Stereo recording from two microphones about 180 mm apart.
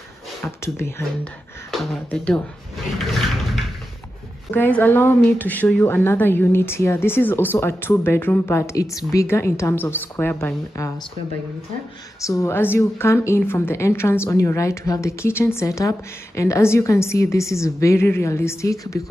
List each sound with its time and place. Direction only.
0.4 s a woman's voice: 15° left (ahead or behind)
1.7 s a woman's voice: 5° left (ahead or behind)
3.0 s a sound: centre (ahead or behind)
4.6 s a woman's voice: 10° left (ahead or behind)
12.3 s a woman's voice: 15° left (ahead or behind)